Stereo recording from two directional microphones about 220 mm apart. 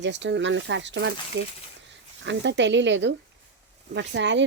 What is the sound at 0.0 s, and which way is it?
Speech, 55° right (ahead or behind).